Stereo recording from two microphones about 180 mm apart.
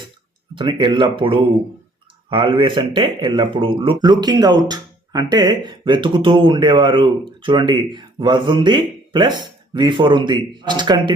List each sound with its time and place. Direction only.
0.5 s speech: 25° right (ahead or behind)